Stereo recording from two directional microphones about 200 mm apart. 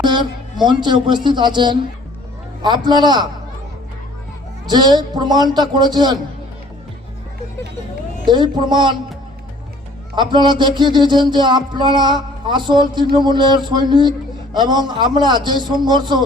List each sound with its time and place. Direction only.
0.0 s speech: 20° right (ahead or behind)
4.6 s speech: 20° right (ahead or behind)
8.3 s speech: 20° right (ahead or behind)
10.2 s speech: 20° right (ahead or behind)